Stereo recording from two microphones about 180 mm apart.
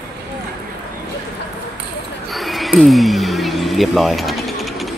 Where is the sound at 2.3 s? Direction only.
Centre (ahead or behind).